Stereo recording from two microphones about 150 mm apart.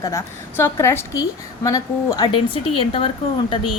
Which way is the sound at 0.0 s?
20° left (ahead or behind).